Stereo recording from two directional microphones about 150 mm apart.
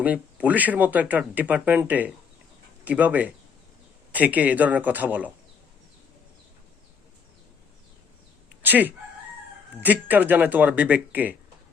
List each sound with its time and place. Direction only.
0.0 s speech: 10° right (ahead or behind)
8.6 s speech: 10° right (ahead or behind)